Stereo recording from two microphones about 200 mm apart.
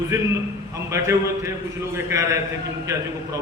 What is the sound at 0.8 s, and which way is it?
A man's voice, 15° right (ahead or behind).